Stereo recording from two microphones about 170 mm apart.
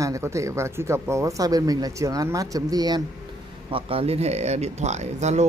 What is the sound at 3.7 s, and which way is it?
Speech, 35° right (ahead or behind).